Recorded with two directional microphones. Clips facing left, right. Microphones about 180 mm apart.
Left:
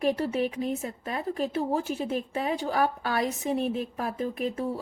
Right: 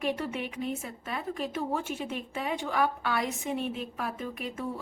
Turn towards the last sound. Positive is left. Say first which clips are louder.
# left 7 dB
turn(degrees=35)  # may be behind; listen again after turning